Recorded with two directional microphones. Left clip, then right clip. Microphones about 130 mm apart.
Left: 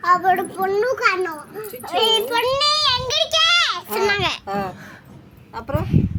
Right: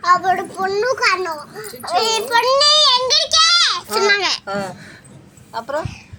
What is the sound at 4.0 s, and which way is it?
Speech, 40° left (ahead or behind).